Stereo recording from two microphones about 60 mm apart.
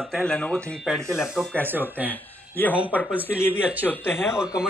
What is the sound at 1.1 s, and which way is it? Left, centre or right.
Speech, centre.